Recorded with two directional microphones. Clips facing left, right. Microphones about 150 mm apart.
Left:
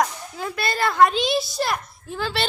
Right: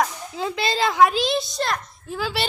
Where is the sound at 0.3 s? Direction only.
20° right (ahead or behind).